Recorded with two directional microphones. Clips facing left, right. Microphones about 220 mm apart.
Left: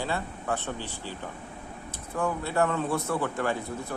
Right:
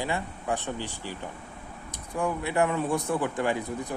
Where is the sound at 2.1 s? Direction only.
15° right (ahead or behind).